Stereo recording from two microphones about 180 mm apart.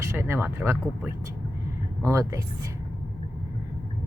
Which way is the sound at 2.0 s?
15° right (ahead or behind).